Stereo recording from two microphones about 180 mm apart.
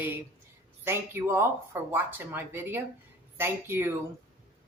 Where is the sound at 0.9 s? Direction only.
15° right (ahead or behind).